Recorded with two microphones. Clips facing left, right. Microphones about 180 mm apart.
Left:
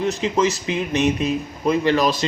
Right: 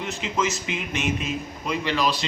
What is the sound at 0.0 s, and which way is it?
Speech, 35° left (ahead or behind).